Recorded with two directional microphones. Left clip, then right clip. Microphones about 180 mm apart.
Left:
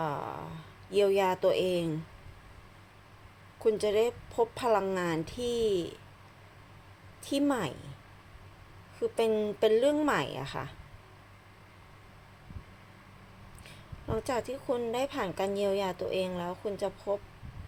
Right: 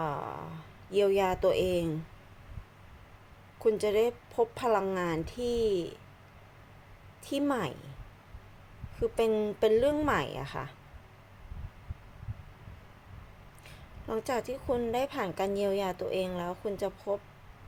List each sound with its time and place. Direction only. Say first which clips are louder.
0.0 s a sound: even; centre (ahead or behind)
3.6 s a woman's voice: even; 5° right (ahead or behind)
7.3 s a woman's voice: left 1 dB; centre (ahead or behind)
9.0 s a woman's voice: even; centre (ahead or behind)
13.7 s a woman's voice: even; 5° right (ahead or behind)